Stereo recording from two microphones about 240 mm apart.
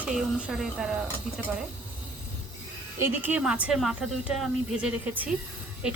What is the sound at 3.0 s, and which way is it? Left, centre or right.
Speech, centre.